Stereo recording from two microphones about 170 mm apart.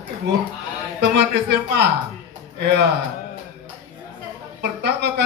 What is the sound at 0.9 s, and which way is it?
Speech, 75° right (ahead or behind).